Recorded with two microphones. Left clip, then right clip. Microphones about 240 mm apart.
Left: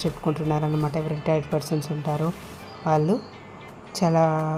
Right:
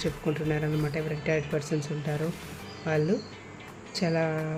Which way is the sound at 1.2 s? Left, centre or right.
Centre.